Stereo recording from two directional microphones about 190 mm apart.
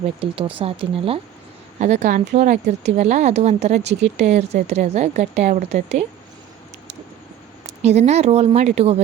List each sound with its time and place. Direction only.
0.0 s speech: 30° right (ahead or behind)
7.8 s speech: 35° right (ahead or behind)